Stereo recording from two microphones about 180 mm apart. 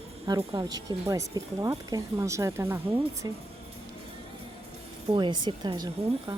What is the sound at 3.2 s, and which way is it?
Speech, 25° right (ahead or behind).